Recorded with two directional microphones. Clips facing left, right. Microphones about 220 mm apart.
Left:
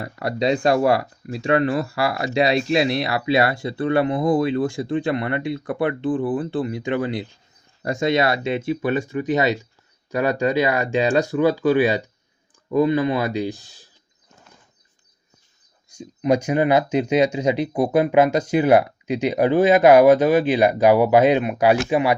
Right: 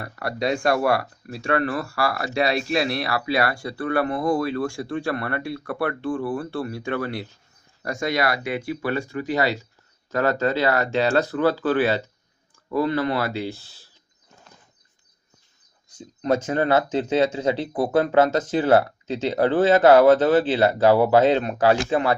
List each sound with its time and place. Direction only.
0.0 s speech: 20° left (ahead or behind)
15.9 s speech: 10° left (ahead or behind)